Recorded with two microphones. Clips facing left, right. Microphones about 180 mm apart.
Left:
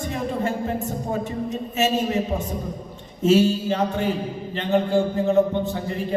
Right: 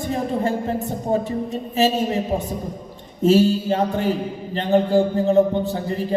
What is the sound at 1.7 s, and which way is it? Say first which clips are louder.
A man's voice: right 3 dB; 35° right (ahead or behind).